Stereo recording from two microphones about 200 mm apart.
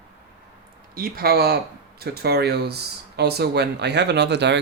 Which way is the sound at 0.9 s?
45° right (ahead or behind).